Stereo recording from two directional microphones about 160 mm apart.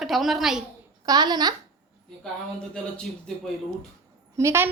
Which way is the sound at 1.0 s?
25° right (ahead or behind).